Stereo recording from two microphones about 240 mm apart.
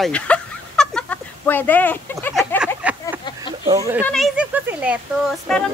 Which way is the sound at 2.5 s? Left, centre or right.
Centre.